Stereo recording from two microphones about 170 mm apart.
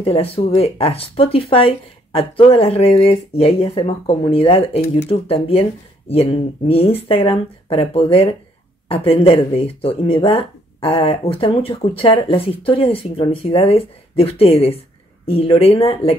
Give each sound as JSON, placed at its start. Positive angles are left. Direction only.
{"t": 0.0, "sound": "speech", "side_deg": 35}